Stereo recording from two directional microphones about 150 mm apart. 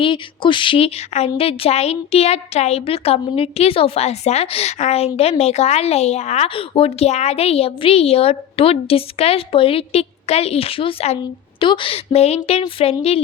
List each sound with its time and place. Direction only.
0.0 s speech: 35° left (ahead or behind)